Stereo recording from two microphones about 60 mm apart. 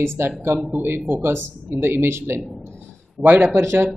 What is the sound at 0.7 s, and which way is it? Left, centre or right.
Speech, right.